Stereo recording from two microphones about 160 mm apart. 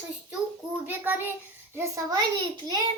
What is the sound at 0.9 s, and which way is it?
A child's voice, 10° right (ahead or behind).